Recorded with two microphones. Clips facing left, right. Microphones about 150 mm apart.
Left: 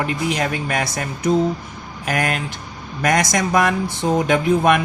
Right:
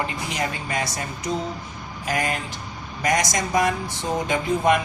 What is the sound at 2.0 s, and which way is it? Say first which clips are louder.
Speech: left 3 dB; 70° left (ahead or behind).